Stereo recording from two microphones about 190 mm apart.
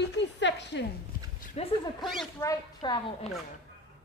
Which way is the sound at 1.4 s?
40° left (ahead or behind).